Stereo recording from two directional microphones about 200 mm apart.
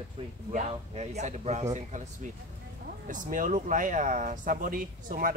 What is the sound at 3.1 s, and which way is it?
A man's voice, 40° right (ahead or behind).